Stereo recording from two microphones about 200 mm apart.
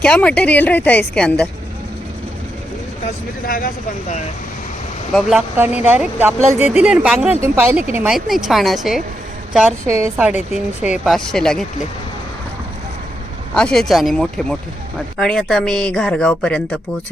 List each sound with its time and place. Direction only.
0.0 s a woman's voice: 5° left (ahead or behind)
3.4 s speech: 45° left (ahead or behind)
5.5 s a woman's voice: 10° right (ahead or behind)
9.8 s speech: 15° right (ahead or behind); by 11.6 s 5° left (ahead or behind)
13.5 s speech: 5° left (ahead or behind)